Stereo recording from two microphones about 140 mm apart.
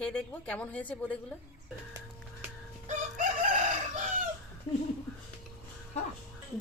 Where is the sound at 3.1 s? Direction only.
60° right (ahead or behind).